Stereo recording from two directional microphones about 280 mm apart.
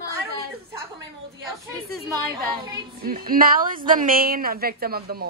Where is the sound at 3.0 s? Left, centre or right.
Right.